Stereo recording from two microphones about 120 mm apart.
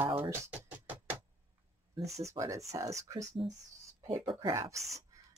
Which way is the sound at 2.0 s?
65° right (ahead or behind).